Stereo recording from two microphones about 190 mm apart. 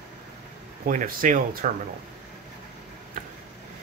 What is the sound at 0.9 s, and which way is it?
Speech, 45° right (ahead or behind).